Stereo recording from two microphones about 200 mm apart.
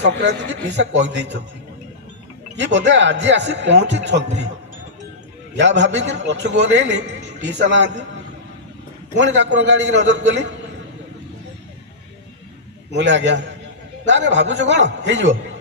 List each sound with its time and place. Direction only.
0.0 s a man's voice: 60° right (ahead or behind)
2.6 s a man's voice: 60° right (ahead or behind)
5.5 s a man's voice: 60° right (ahead or behind)
9.1 s a man's voice: 60° right (ahead or behind)
13.0 s a man's voice: 65° right (ahead or behind)